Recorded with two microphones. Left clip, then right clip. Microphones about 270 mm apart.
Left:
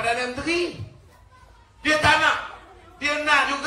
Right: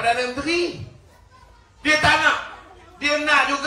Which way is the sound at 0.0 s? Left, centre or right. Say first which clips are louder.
Right 3 dB; right.